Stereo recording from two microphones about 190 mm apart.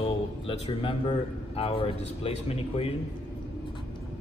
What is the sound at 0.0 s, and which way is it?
A man's voice, 30° left (ahead or behind).